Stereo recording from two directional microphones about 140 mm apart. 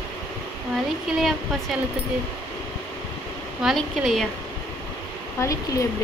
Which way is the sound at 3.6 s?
Centre (ahead or behind).